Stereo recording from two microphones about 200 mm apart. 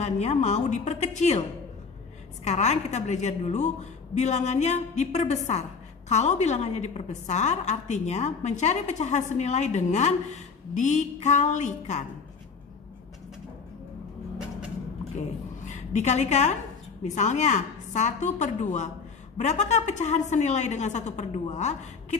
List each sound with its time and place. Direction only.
0.0 s a woman's voice: 35° left (ahead or behind)
2.4 s a woman's voice: 35° left (ahead or behind)
15.1 s a woman's voice: 35° left (ahead or behind)